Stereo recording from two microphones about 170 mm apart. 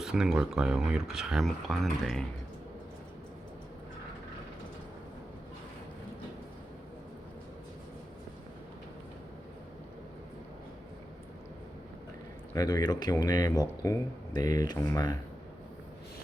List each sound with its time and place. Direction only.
0.0 s speech: 5° right (ahead or behind)
12.5 s speech: 20° left (ahead or behind)